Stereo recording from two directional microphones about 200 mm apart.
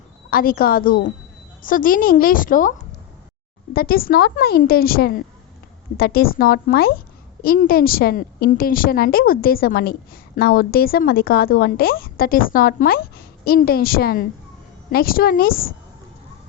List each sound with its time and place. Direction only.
0.3 s a woman's voice: 45° left (ahead or behind)
3.8 s a woman's voice: 50° left (ahead or behind)